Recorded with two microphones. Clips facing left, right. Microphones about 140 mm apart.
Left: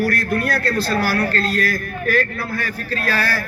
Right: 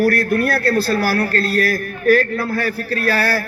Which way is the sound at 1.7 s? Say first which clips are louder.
Right 6 dB; 50° right (ahead or behind).